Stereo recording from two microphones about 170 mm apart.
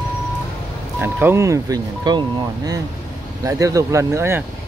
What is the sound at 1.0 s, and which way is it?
Speech, 15° right (ahead or behind).